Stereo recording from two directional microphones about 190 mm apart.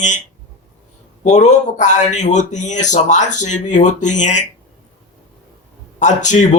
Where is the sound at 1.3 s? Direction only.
40° left (ahead or behind).